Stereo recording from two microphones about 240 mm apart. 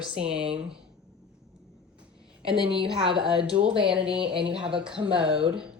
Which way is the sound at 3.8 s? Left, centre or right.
Centre.